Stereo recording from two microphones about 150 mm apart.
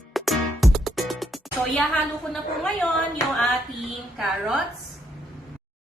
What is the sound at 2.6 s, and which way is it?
Speech, 5° left (ahead or behind).